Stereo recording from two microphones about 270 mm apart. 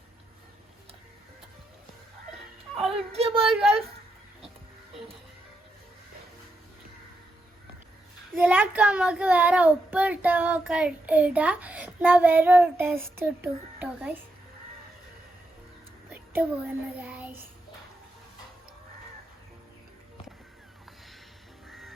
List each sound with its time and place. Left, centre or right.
2.8 s a child's voice: right
8.4 s a child's voice: centre
16.1 s child singing: centre
21.7 s music: centre